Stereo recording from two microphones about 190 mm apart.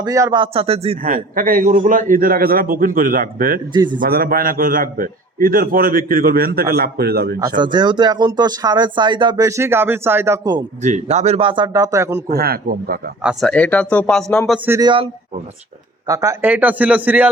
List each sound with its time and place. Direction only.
0.0 s speech: 20° right (ahead or behind)
1.1 s a man's voice: 45° right (ahead or behind)
3.7 s speech: 25° right (ahead or behind)
4.0 s a man's voice: 50° right (ahead or behind)
7.3 s speech: 20° right (ahead or behind)
10.8 s speech: 40° right (ahead or behind); by 12.2 s 15° right (ahead or behind)
12.3 s a man's voice: 55° right (ahead or behind)
13.2 s speech: 5° left (ahead or behind)
14.6 s a man's voice: 10° right (ahead or behind)
14.8 s speech: 25° right (ahead or behind)
16.0 s a man's voice: 15° right (ahead or behind)